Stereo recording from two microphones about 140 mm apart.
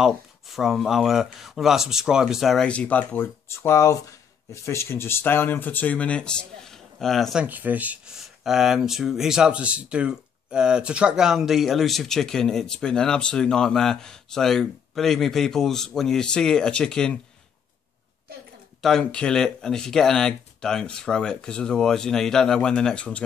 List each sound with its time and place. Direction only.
0.0 s speech: centre (ahead or behind)
7.4 s speech: 10° right (ahead or behind); by 17.2 s 5° left (ahead or behind)
18.8 s speech: 5° left (ahead or behind)